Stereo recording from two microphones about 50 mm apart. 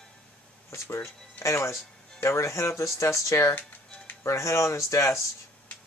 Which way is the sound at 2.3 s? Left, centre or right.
Left.